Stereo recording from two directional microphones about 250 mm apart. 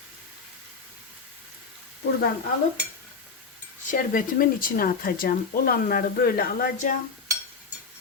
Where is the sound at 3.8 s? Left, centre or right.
Left.